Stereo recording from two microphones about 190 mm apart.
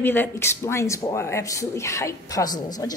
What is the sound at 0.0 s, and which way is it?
Speech, 10° left (ahead or behind).